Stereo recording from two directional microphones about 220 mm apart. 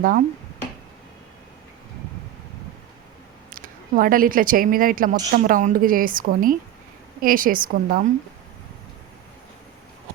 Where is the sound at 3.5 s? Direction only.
40° right (ahead or behind).